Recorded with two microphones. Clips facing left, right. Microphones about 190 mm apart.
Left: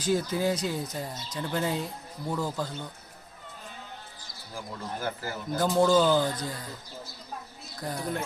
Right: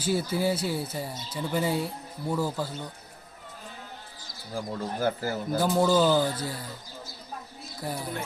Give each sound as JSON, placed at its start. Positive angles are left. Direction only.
{"t": 0.0, "sound": "speech", "side_deg": -10}
{"t": 4.5, "sound": "speech", "side_deg": -40}
{"t": 5.5, "sound": "speech", "side_deg": -5}
{"t": 7.8, "sound": "speech", "side_deg": -5}